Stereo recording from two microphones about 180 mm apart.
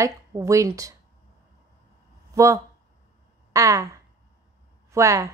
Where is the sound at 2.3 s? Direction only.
15° right (ahead or behind).